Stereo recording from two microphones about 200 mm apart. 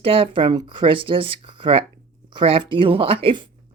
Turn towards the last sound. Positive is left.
turn(degrees=-25)  # may be behind; listen again after turning